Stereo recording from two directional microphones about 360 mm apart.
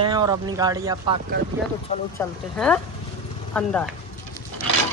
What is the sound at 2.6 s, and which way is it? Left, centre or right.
Music, centre.